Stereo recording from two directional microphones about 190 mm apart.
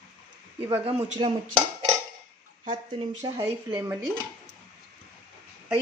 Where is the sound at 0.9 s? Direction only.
35° right (ahead or behind).